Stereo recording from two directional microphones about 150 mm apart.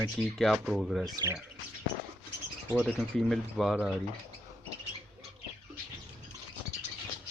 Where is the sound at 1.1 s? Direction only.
25° right (ahead or behind).